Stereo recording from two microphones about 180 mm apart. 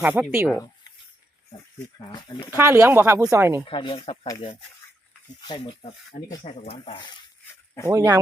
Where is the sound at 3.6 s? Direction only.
30° left (ahead or behind).